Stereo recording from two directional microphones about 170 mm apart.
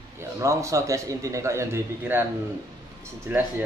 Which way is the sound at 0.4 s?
20° right (ahead or behind).